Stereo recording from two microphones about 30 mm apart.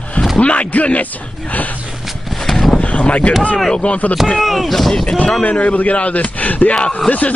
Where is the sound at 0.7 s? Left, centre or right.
Left.